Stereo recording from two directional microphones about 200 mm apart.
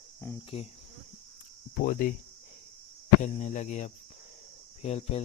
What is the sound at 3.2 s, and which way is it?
Speech, 35° left (ahead or behind).